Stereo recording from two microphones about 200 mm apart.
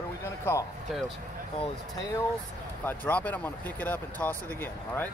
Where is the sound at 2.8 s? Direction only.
10° left (ahead or behind).